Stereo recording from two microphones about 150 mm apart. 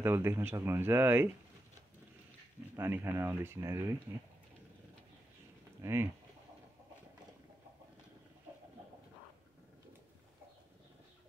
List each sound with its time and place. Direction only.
0.0 s speech: 15° right (ahead or behind)
2.7 s speech: 15° right (ahead or behind)
5.8 s speech: 20° right (ahead or behind)